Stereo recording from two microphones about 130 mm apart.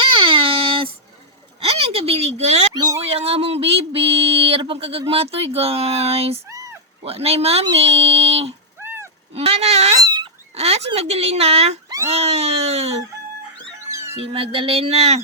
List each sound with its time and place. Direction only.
0.0 s a sound: 45° right (ahead or behind)
2.7 s speech: 30° right (ahead or behind)
3.0 s speech: 50° right (ahead or behind)
6.5 s a sound: 25° right (ahead or behind)
7.0 s speech: 50° right (ahead or behind)
8.8 s a sound: 15° right (ahead or behind)
9.3 s speech: 50° right (ahead or behind)
13.9 s music: 20° right (ahead or behind)
14.2 s speech: 50° right (ahead or behind)